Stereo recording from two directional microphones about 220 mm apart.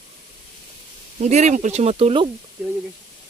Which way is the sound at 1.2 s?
30° right (ahead or behind).